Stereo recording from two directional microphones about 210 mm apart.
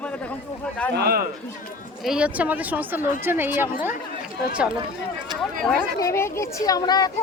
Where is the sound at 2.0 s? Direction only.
5° right (ahead or behind).